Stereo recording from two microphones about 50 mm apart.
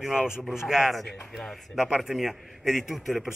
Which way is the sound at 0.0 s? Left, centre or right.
Centre.